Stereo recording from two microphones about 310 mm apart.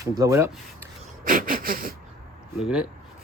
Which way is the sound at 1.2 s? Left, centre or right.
Right.